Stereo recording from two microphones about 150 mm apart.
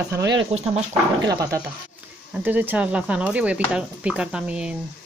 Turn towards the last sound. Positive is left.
turn(degrees=-5)  # may be behind; listen again after turning